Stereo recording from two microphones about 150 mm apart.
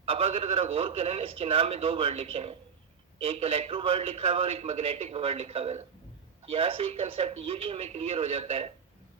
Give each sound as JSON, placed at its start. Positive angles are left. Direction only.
{"t": 0.0, "sound": "a man's voice", "side_deg": -40}